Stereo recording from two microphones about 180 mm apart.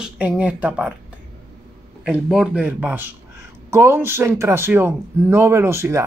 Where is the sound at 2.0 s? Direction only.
Centre (ahead or behind).